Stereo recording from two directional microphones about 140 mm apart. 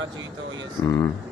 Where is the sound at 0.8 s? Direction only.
20° left (ahead or behind).